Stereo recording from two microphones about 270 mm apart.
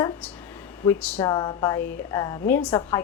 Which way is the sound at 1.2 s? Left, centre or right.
Centre.